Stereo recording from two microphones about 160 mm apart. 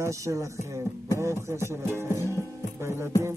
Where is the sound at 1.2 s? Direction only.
15° right (ahead or behind).